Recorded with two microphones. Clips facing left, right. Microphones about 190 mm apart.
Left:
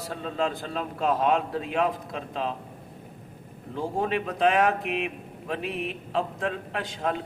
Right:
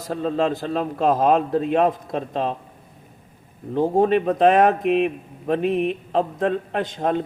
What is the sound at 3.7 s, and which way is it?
A man's voice, 35° right (ahead or behind).